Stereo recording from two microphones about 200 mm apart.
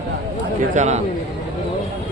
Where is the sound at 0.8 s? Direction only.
35° right (ahead or behind).